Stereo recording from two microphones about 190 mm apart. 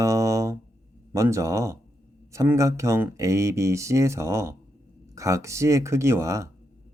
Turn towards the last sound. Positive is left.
turn(degrees=-15)  # may be behind; listen again after turning